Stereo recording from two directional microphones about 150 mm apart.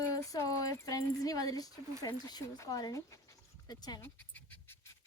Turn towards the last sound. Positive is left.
turn(degrees=25)  # may be behind; listen again after turning